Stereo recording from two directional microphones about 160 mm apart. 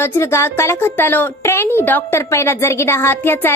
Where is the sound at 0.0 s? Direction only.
15° left (ahead or behind).